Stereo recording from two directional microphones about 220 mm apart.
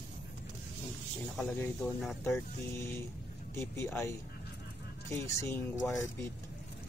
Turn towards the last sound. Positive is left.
turn(degrees=10)  # may be behind; listen again after turning